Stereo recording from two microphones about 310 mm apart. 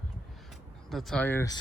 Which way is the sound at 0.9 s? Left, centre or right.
Centre.